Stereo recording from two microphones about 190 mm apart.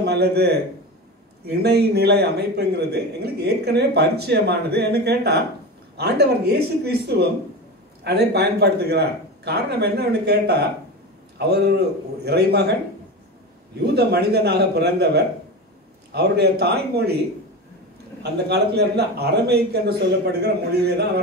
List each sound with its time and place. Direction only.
0.0 s a man's voice: 60° right (ahead or behind)
13.9 s a man's voice: 60° right (ahead or behind)
18.2 s a man's voice: 60° right (ahead or behind)